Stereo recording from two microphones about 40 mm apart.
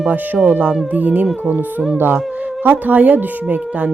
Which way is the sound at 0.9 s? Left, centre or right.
Right.